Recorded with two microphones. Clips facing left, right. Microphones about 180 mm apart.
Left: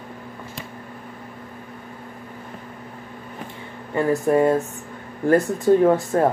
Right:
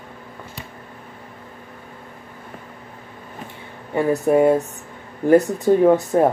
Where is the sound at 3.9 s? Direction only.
10° right (ahead or behind).